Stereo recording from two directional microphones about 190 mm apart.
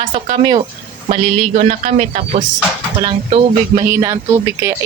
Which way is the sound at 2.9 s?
30° right (ahead or behind).